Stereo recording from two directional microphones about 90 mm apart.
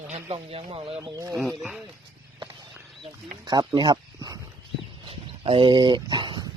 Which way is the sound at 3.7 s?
55° right (ahead or behind).